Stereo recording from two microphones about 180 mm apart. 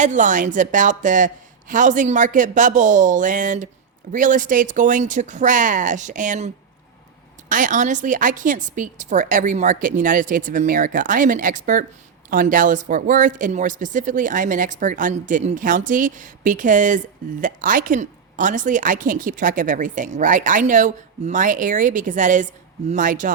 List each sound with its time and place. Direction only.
0.0 s a woman's voice: 45° right (ahead or behind)
7.5 s a woman's voice: 45° right (ahead or behind)